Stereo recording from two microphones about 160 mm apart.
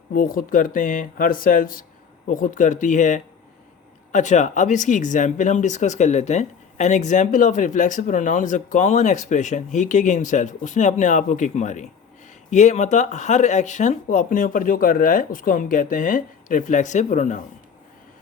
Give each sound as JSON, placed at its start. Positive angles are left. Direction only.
{"t": 0.1, "sound": "speech", "side_deg": 60}